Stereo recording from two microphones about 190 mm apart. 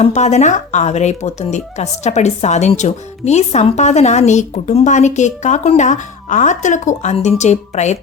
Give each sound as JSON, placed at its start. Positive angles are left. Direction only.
{"t": 0.0, "sound": "speech", "side_deg": 35}